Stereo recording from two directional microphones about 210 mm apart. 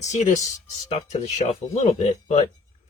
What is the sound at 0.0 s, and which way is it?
Speech, 35° left (ahead or behind).